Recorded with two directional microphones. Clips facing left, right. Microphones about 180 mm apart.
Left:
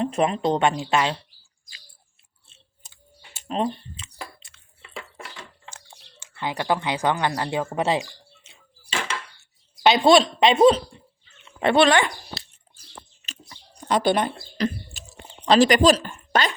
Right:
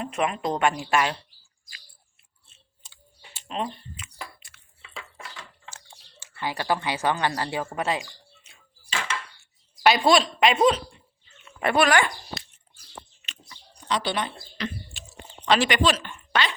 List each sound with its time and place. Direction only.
0.0 s speech: 30° left (ahead or behind)
2.8 s chewing: 45° left (ahead or behind); by 4.6 s 25° left (ahead or behind)
6.3 s speech: 20° left (ahead or behind)
8.4 s a sound: 20° left (ahead or behind)
9.8 s speech: 20° left (ahead or behind)
13.8 s speech: 50° left (ahead or behind)